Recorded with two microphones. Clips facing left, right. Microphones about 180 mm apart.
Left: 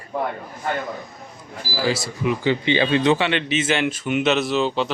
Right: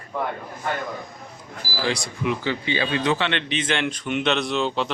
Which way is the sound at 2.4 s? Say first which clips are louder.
Left 5 dB; 20° left (ahead or behind).